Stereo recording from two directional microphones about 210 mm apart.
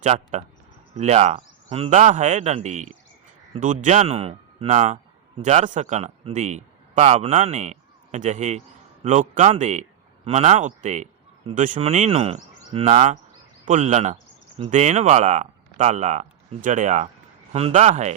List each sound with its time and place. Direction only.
0.0 s a man's voice: 30° right (ahead or behind)